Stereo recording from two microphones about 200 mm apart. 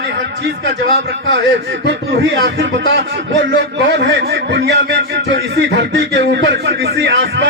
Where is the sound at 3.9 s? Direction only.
60° right (ahead or behind).